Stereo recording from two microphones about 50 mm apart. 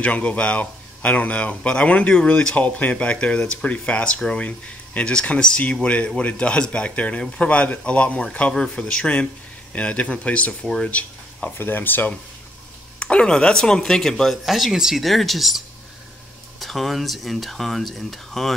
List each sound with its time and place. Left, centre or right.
0.0 s speech: left
8.5 s speech: centre
10.9 s a sound: left
11.5 s speech: left
13.0 s speech: centre
14.3 s speech: centre